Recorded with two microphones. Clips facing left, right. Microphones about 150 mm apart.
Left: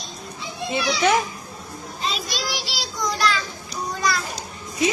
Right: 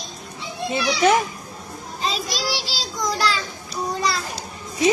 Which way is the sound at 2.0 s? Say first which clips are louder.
Right 2 dB; 35° right (ahead or behind).